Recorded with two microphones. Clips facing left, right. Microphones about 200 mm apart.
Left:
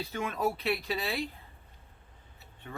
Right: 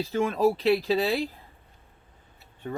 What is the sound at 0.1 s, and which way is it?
Speech, 30° right (ahead or behind).